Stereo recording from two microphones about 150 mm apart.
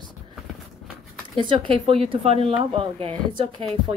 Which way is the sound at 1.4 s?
35° right (ahead or behind).